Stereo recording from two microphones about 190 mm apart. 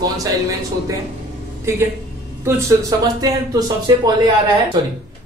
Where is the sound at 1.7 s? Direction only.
15° right (ahead or behind).